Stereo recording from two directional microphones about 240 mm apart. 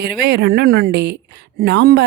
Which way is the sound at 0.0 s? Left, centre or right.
Right.